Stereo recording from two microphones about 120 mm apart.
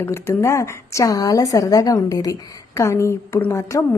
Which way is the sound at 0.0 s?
20° left (ahead or behind).